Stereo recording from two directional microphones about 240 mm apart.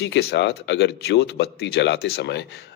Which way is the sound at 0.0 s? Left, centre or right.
Left.